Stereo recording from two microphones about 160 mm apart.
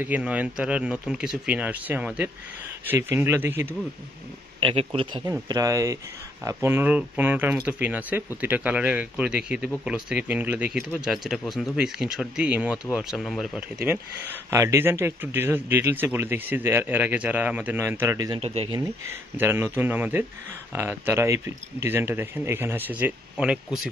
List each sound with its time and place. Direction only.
0.0 s speech: 10° right (ahead or behind)
4.6 s a man's voice: 35° right (ahead or behind)
5.5 s speech: 20° right (ahead or behind); by 13.9 s 5° right (ahead or behind)
14.5 s speech: 15° right (ahead or behind)
18.4 s a man's voice: 40° right (ahead or behind)
18.7 s speech: 20° right (ahead or behind)